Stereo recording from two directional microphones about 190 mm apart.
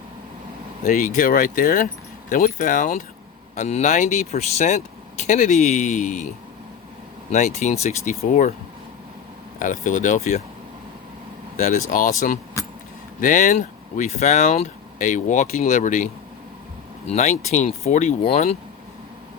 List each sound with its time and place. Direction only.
0.9 s speech: 45° left (ahead or behind)
9.6 s speech: 40° left (ahead or behind)
11.5 s speech: 40° left (ahead or behind)
17.2 s speech: 40° left (ahead or behind)